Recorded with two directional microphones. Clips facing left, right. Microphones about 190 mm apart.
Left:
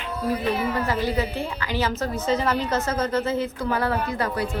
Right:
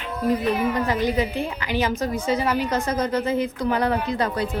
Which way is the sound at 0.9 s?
15° right (ahead or behind).